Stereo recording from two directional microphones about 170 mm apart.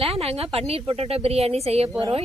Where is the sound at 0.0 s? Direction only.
35° right (ahead or behind).